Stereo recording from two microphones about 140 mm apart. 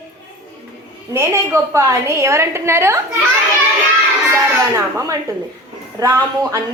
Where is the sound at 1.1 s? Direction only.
20° right (ahead or behind).